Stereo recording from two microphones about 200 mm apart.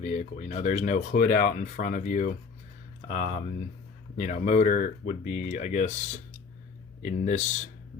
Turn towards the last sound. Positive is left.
turn(degrees=35)  # may be behind; listen again after turning